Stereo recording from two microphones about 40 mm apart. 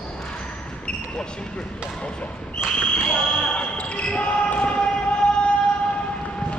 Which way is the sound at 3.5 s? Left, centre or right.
Left.